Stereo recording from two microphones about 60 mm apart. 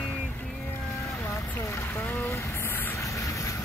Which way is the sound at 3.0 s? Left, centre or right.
Left.